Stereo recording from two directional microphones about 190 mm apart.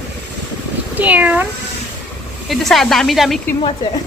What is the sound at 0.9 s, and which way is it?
Speech, 10° right (ahead or behind).